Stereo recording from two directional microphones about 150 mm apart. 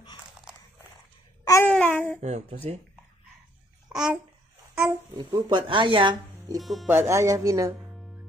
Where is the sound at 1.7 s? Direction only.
5° left (ahead or behind).